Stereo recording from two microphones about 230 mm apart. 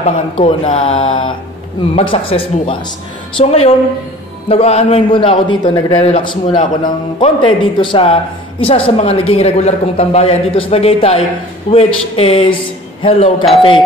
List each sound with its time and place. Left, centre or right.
0.0 s a man's voice: left